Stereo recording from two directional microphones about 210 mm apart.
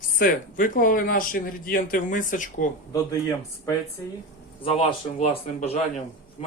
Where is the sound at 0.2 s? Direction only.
40° left (ahead or behind).